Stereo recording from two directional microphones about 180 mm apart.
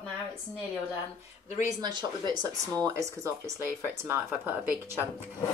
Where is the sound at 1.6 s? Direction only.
25° right (ahead or behind).